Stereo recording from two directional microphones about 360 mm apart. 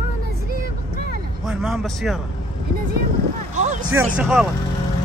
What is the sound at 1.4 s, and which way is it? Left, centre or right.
Speech, centre.